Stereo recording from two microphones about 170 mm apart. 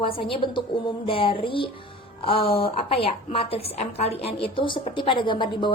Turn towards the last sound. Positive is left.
turn(degrees=30)  # may be behind; listen again after turning